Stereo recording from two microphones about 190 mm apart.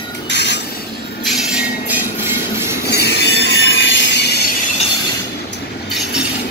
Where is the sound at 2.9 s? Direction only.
60° left (ahead or behind).